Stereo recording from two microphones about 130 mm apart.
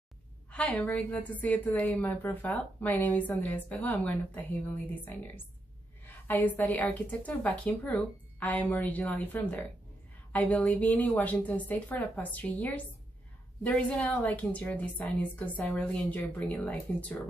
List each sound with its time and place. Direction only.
0.5 s a woman's voice: 10° left (ahead or behind)